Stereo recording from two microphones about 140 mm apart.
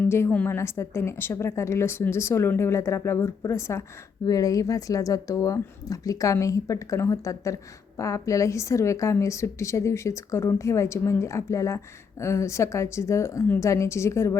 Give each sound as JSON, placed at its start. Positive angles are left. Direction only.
{"t": 0.0, "sound": "a woman's voice", "side_deg": 15}